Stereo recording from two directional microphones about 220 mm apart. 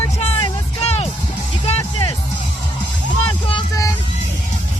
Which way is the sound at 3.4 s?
20° left (ahead or behind).